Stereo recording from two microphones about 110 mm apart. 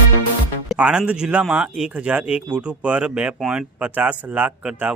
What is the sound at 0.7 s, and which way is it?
Speech, 10° right (ahead or behind).